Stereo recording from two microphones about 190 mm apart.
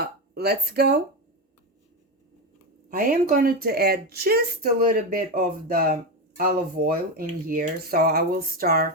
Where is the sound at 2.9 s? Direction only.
50° right (ahead or behind).